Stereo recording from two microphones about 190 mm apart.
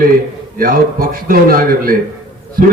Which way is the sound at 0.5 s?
50° right (ahead or behind).